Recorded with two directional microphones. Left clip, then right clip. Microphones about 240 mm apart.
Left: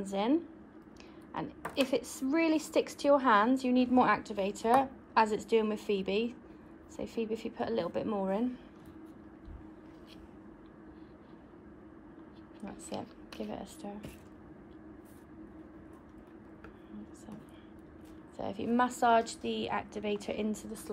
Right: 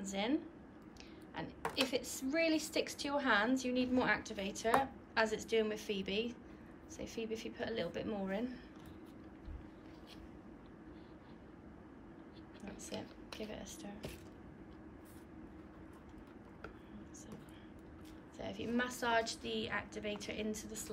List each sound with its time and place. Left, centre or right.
0.0 s a woman's voice: centre
13.5 s a woman's voice: centre
18.4 s a woman's voice: centre